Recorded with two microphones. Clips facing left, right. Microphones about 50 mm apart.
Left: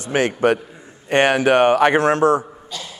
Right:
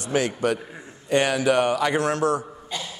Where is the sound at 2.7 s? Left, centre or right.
Centre.